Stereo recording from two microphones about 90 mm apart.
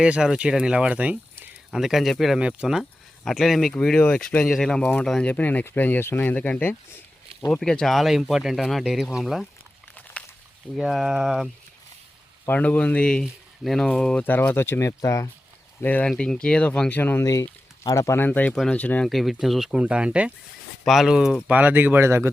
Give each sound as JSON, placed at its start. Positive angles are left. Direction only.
{"t": 0.0, "sound": "speech", "side_deg": -10}
{"t": 1.7, "sound": "speech", "side_deg": -5}
{"t": 2.4, "sound": "speech", "side_deg": -10}
{"t": 5.3, "sound": "speech", "side_deg": 20}
{"t": 7.5, "sound": "speech", "side_deg": 10}
{"t": 10.8, "sound": "speech", "side_deg": -5}
{"t": 12.5, "sound": "speech", "side_deg": 15}
{"t": 15.8, "sound": "speech", "side_deg": 20}
{"t": 16.0, "sound": "speech", "side_deg": 10}
{"t": 16.9, "sound": "speech", "side_deg": 25}
{"t": 17.8, "sound": "speech", "side_deg": 35}
{"t": 19.0, "sound": "speech", "side_deg": 0}
{"t": 20.8, "sound": "speech", "side_deg": 0}
{"t": 21.4, "sound": "speech", "side_deg": -15}